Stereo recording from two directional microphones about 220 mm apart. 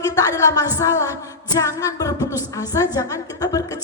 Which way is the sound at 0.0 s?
15° left (ahead or behind).